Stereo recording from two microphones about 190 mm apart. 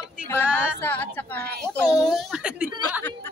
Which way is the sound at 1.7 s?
Centre (ahead or behind).